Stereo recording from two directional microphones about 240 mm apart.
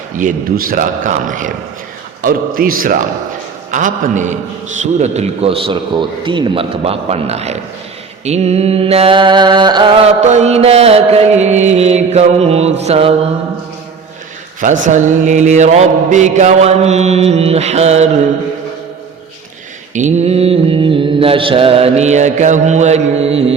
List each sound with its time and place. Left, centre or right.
0.2 s a man's voice: right
4.8 s mantra: right
14.8 s mantra: right
19.9 s mantra: right